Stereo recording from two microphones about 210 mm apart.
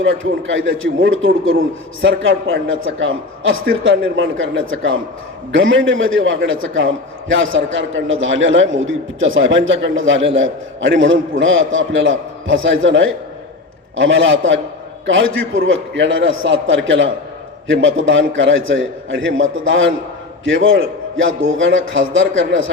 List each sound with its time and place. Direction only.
0.0 s a man's voice: 70° right (ahead or behind)